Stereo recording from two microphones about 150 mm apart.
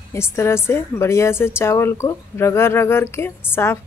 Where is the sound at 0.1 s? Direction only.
15° left (ahead or behind).